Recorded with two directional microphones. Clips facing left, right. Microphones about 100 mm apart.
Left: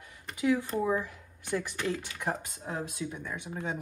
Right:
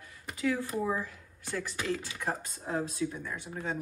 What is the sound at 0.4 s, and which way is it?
Speech, 15° left (ahead or behind).